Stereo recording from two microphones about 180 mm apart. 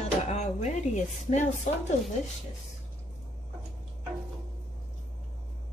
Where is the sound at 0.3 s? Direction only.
40° left (ahead or behind).